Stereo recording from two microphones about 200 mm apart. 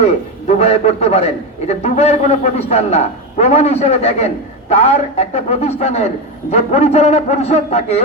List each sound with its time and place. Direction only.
0.0 s a man's voice: 30° left (ahead or behind)